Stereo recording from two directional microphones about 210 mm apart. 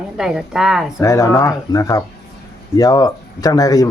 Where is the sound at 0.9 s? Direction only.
15° left (ahead or behind).